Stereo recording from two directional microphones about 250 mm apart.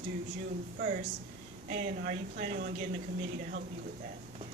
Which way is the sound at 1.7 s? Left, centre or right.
Right.